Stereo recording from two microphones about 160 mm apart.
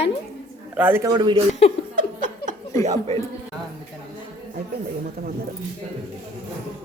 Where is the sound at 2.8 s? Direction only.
45° right (ahead or behind).